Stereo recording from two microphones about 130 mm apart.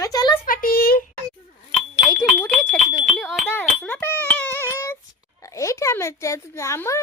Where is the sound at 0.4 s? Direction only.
90° left.